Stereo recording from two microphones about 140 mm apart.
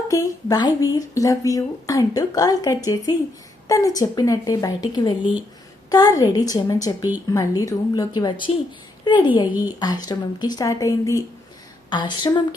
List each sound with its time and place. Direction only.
0.1 s speech: 25° left (ahead or behind)
9.5 s speech: 10° right (ahead or behind)
9.8 s speech: 30° left (ahead or behind)